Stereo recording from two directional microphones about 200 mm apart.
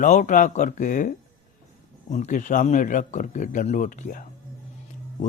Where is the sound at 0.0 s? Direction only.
40° left (ahead or behind).